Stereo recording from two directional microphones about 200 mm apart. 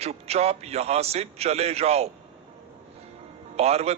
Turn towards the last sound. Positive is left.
turn(degrees=-30)  # may be behind; listen again after turning